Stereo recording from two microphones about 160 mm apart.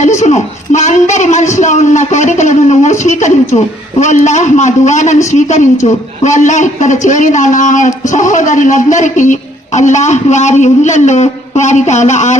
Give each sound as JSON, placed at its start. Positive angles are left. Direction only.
{"t": 0.0, "sound": "a man's voice", "side_deg": 45}